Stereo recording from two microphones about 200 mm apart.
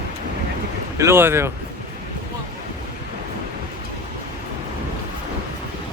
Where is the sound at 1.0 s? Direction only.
10° right (ahead or behind).